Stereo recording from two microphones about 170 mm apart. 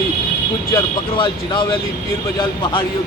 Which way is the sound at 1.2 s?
30° left (ahead or behind).